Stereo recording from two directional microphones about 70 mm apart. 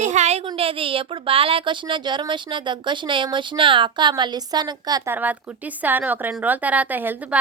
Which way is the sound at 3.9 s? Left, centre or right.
Right.